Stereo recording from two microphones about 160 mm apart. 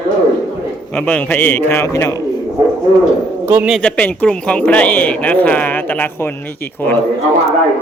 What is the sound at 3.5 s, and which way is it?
Speech, 10° right (ahead or behind).